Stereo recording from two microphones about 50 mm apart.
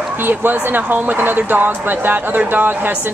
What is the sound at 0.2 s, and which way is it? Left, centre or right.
Speech, right.